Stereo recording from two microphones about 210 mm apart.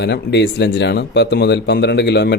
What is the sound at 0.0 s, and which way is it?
A man's voice, 55° left (ahead or behind).